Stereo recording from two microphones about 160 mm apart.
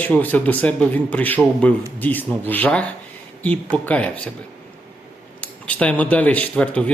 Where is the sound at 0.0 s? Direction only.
10° left (ahead or behind).